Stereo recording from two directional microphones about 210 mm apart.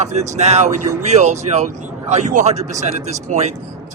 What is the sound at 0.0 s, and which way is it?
A man's voice, 30° right (ahead or behind).